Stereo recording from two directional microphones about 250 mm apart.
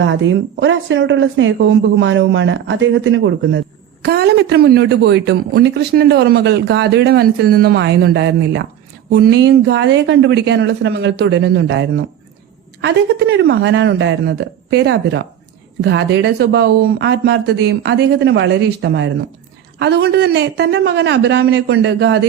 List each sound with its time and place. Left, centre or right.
0.0 s a man's voice: right